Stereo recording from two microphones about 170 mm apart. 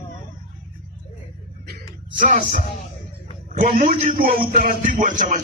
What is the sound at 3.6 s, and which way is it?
A man's voice, 55° right (ahead or behind).